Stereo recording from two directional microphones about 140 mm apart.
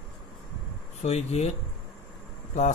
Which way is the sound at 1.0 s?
50° left (ahead or behind).